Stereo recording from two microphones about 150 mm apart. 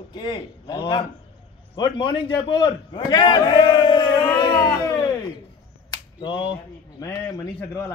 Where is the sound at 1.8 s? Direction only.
30° left (ahead or behind).